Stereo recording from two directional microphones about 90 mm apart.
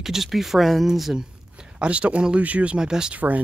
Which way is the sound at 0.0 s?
5° right (ahead or behind).